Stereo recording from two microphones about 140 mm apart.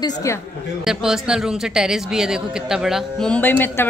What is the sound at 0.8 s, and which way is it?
A woman's voice, 5° right (ahead or behind).